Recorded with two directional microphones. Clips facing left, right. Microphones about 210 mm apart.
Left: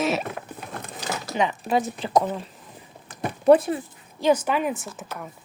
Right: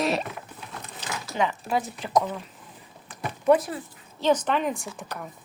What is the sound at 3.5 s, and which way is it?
Speech, 25° left (ahead or behind).